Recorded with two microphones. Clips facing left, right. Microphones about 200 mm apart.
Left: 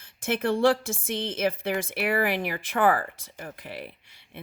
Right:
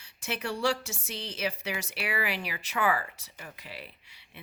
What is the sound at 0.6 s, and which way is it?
Speech, 50° left (ahead or behind).